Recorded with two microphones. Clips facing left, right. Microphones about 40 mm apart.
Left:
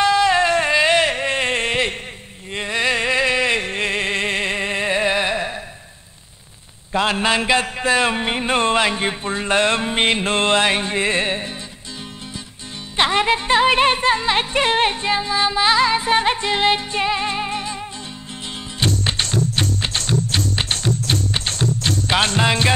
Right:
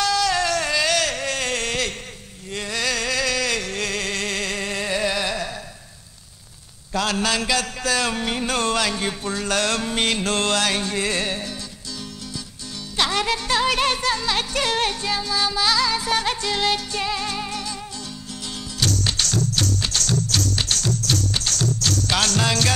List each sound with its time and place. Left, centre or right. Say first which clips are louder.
0.0 s a sound: left 5 dB; left
6.9 s music: left 4 dB; left
12.9 s music: left 5 dB; left
18.8 s music: left 2 dB; left